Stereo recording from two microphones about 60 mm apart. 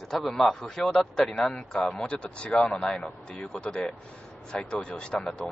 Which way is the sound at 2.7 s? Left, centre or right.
Centre.